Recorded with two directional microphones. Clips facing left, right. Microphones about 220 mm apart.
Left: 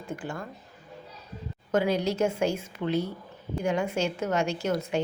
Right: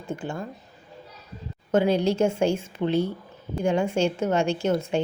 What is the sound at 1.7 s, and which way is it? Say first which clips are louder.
A woman's voice: right 4 dB; 30° right (ahead or behind).